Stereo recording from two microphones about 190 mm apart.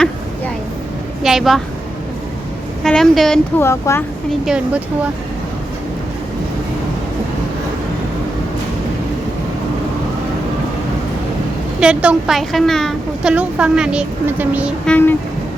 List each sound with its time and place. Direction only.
1.2 s a woman's voice: centre (ahead or behind)
2.8 s a woman's voice: 5° left (ahead or behind)
3.6 s speech: 15° left (ahead or behind)
4.4 s a woman's voice: 5° right (ahead or behind)
11.8 s a woman's voice: 5° right (ahead or behind)
14.8 s speech: 10° left (ahead or behind)